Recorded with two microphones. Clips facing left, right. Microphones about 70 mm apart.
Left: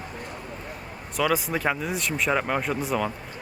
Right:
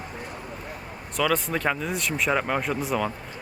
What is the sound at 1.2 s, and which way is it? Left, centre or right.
Speech, centre.